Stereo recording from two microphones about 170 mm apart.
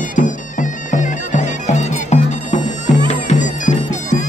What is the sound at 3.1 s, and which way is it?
Music, 45° left (ahead or behind).